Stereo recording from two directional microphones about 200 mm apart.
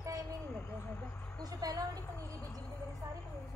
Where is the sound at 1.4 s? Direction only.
20° right (ahead or behind).